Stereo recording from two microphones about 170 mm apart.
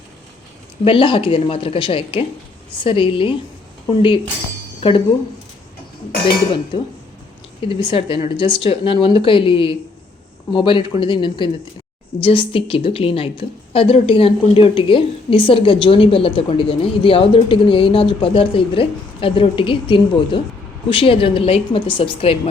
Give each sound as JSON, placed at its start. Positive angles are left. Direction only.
{"t": 0.9, "sound": "a woman's voice", "side_deg": 30}
{"t": 7.8, "sound": "a woman's voice", "side_deg": 30}